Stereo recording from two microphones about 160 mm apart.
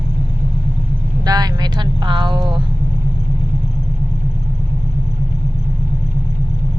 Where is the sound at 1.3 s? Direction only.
25° right (ahead or behind).